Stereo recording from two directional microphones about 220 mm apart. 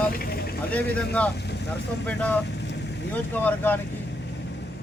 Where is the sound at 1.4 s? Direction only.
50° left (ahead or behind).